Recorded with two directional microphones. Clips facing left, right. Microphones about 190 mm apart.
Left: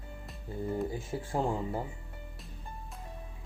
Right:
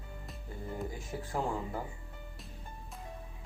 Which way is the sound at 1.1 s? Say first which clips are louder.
Left 4 dB; 25° left (ahead or behind).